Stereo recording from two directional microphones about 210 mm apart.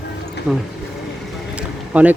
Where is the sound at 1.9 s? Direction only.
5° right (ahead or behind).